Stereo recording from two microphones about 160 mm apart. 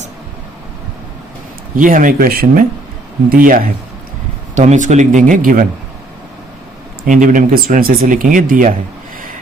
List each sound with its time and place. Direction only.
1.7 s speech: 55° right (ahead or behind)
4.5 s speech: 45° right (ahead or behind)
7.0 s speech: 55° right (ahead or behind)